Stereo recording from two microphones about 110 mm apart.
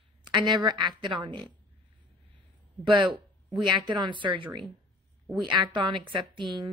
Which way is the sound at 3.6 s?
45° right (ahead or behind).